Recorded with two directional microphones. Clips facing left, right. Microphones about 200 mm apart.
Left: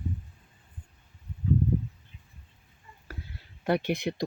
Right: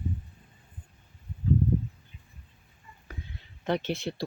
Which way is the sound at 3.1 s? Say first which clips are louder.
Even; 5° left (ahead or behind).